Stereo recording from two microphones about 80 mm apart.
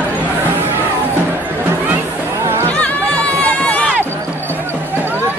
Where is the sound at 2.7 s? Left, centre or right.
Centre.